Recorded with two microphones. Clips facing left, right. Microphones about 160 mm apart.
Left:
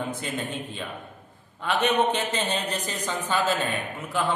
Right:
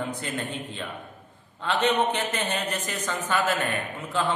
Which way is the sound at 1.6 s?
15° left (ahead or behind).